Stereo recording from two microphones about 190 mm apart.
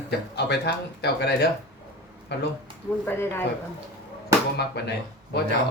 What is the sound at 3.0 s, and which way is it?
Speech, 10° left (ahead or behind).